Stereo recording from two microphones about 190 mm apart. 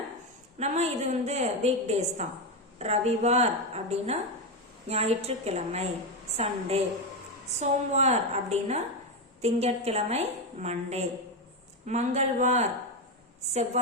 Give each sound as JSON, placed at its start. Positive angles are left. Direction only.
{"t": 0.6, "sound": "a woman's voice", "side_deg": -35}